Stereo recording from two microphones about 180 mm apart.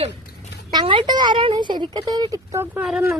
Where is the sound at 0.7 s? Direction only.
25° right (ahead or behind).